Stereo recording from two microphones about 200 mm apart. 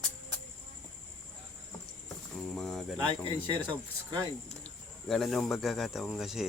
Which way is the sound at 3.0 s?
25° right (ahead or behind).